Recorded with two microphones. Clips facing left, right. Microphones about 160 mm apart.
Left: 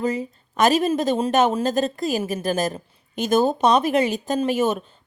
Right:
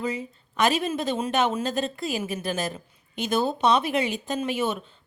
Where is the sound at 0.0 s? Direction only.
45° left (ahead or behind).